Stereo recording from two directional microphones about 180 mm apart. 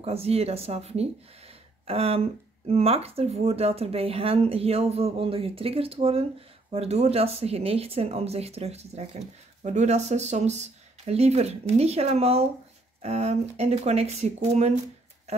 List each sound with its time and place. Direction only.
0.0 s speech: 35° right (ahead or behind)